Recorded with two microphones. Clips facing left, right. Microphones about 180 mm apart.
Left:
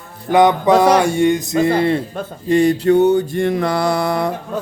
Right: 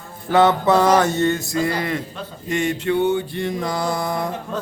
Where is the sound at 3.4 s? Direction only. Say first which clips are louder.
Left 6 dB; 65° left (ahead or behind).